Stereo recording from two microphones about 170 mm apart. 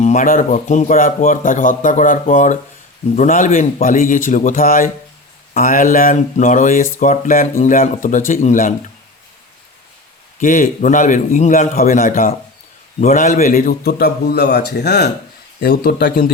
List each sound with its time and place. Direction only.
0.0 s a man's voice: 50° left (ahead or behind)
10.4 s a man's voice: 50° left (ahead or behind); by 15.1 s 70° left (ahead or behind)
15.7 s a man's voice: 55° left (ahead or behind)